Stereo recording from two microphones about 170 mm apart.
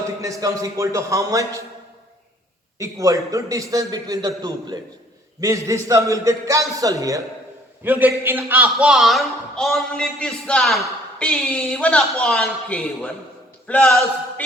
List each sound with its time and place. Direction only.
0.2 s a man's voice: 20° right (ahead or behind)
2.7 s a man's voice: 20° right (ahead or behind); by 13.1 s 5° left (ahead or behind)
13.7 s a sound: 5° left (ahead or behind)